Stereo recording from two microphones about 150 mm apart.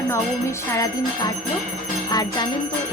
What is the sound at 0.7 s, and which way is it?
Jingle bell, 25° left (ahead or behind).